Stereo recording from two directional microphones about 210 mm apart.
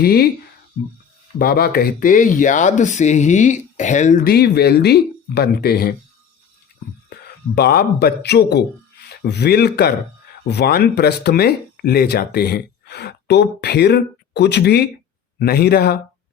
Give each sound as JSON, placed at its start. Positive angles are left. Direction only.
{"t": 0.0, "sound": "speech", "side_deg": 45}
{"t": 1.4, "sound": "speech", "side_deg": 45}
{"t": 7.1, "sound": "speech", "side_deg": 50}